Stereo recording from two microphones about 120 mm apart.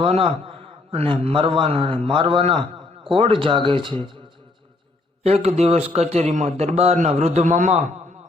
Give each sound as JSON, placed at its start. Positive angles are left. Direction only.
{"t": 0.0, "sound": "a man's voice", "side_deg": -50}
{"t": 5.2, "sound": "a man's voice", "side_deg": -60}